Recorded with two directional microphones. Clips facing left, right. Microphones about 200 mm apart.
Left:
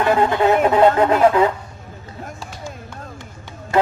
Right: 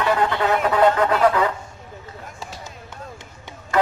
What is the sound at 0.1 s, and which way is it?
Speech, 25° left (ahead or behind).